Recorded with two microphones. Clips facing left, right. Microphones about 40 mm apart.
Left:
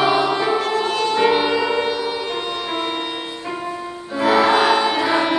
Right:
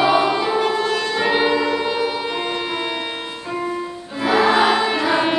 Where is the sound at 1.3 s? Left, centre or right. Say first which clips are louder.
Even; centre.